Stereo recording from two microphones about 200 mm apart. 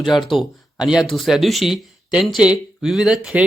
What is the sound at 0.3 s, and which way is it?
Speech, 5° right (ahead or behind).